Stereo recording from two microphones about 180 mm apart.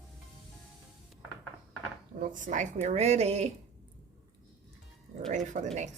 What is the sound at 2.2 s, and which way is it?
Speech, 45° right (ahead or behind).